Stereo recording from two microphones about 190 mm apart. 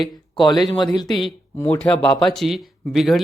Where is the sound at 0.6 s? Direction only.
25° left (ahead or behind).